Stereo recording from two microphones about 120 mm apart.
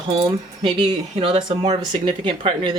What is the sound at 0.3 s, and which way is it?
Speech, 40° right (ahead or behind).